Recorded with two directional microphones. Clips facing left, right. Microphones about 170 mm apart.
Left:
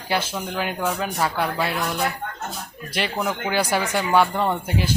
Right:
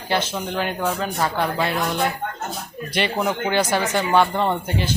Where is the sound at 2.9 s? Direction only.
Centre (ahead or behind).